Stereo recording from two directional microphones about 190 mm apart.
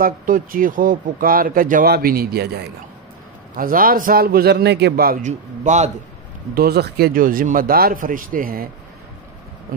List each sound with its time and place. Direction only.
0.0 s speech: 45° right (ahead or behind)
3.5 s speech: 50° right (ahead or behind)
6.5 s speech: 55° right (ahead or behind)